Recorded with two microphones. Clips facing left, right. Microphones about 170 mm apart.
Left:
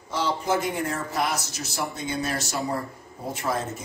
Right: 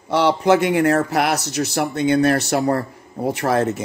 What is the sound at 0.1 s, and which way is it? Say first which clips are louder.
Speech: right 10 dB; 70° right (ahead or behind).